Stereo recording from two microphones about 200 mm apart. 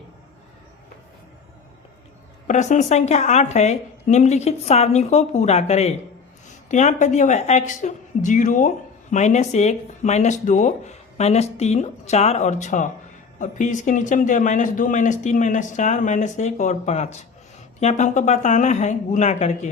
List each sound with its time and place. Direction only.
2.5 s speech: 35° left (ahead or behind)